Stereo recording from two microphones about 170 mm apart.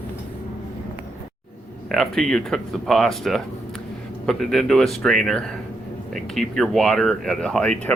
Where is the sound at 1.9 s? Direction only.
Centre (ahead or behind).